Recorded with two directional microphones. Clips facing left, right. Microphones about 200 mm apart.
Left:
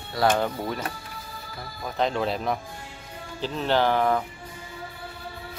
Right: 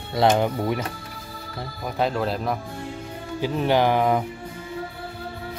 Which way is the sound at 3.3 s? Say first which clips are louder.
Right 3 dB; 15° right (ahead or behind).